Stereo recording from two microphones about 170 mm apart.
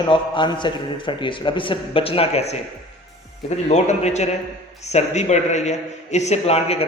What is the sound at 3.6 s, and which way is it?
A man's voice, 40° left (ahead or behind).